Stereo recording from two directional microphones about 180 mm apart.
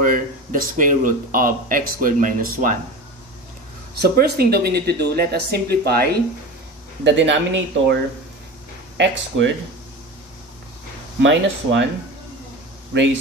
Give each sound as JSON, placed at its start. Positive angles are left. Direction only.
{"t": 0.0, "sound": "speech", "side_deg": -50}
{"t": 3.9, "sound": "speech", "side_deg": -60}
{"t": 7.1, "sound": "speech", "side_deg": -90}
{"t": 11.1, "sound": "speech", "side_deg": -90}